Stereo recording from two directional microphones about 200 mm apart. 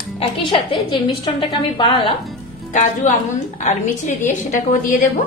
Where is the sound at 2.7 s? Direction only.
40° left (ahead or behind).